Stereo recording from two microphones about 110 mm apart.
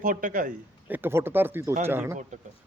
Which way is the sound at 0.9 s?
20° right (ahead or behind).